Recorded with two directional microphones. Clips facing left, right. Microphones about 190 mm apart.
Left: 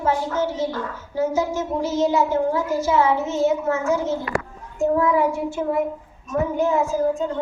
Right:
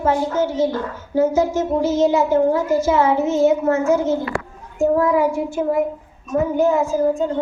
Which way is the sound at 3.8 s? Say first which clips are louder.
Right 4 dB; 20° right (ahead or behind).